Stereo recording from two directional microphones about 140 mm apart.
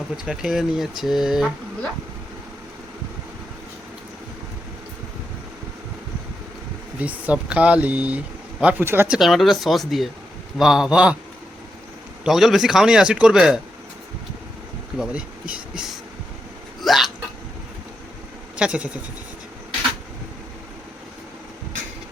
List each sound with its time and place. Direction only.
0.3 s a man's voice: 5° right (ahead or behind)
7.0 s speech: 10° right (ahead or behind)
9.1 s a man's voice: centre (ahead or behind)
12.2 s a man's voice: centre (ahead or behind)
14.9 s speech: 5° right (ahead or behind)
16.8 s hiccup: centre (ahead or behind)
18.5 s speech: 10° right (ahead or behind)